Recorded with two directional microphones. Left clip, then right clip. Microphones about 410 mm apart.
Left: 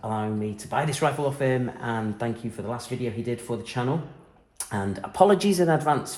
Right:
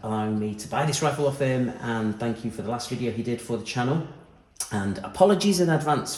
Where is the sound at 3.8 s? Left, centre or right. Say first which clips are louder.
Even; centre.